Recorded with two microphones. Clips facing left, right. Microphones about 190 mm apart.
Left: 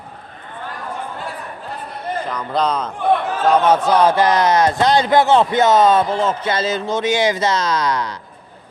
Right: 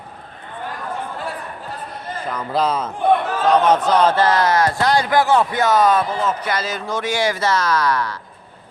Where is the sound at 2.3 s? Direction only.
5° right (ahead or behind).